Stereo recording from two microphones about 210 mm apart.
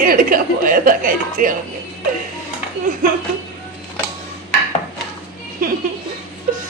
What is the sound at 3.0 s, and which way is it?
Speech, 40° right (ahead or behind).